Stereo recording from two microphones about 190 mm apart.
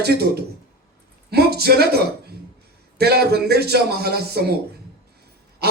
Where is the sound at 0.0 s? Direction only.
55° right (ahead or behind).